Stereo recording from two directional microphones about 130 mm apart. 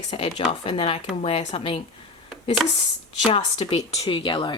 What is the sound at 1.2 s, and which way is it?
Speech, 55° left (ahead or behind).